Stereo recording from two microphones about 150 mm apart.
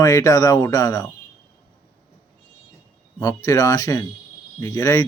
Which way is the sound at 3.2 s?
20° left (ahead or behind).